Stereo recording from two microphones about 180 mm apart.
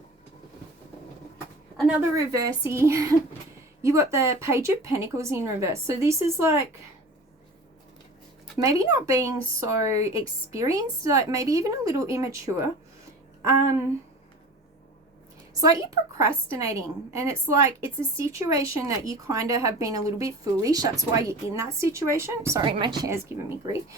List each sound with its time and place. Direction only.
1.7 s speech: 5° right (ahead or behind)
2.1 s a woman's voice: 20° right (ahead or behind)
8.5 s a woman's voice: 20° right (ahead or behind)
15.6 s a woman's voice: 20° right (ahead or behind)
22.6 s a woman's voice: 25° right (ahead or behind)